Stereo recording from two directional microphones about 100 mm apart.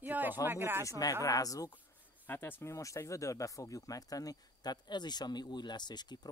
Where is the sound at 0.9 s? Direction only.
40° left (ahead or behind).